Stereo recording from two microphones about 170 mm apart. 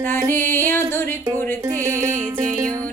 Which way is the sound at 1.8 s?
15° right (ahead or behind).